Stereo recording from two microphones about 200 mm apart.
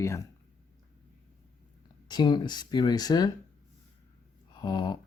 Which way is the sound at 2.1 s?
20° left (ahead or behind).